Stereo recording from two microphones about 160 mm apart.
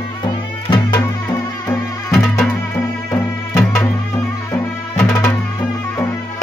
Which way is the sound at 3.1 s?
10° left (ahead or behind).